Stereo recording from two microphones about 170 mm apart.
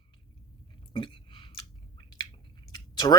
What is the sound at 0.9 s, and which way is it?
Chewing, 30° left (ahead or behind).